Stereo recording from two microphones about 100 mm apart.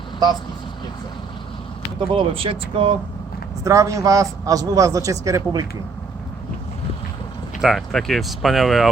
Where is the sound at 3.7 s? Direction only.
30° right (ahead or behind).